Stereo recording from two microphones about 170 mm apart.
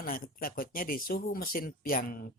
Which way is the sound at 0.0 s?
60° left (ahead or behind).